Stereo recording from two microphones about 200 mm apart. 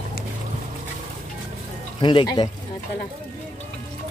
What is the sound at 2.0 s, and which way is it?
Speech, 25° left (ahead or behind).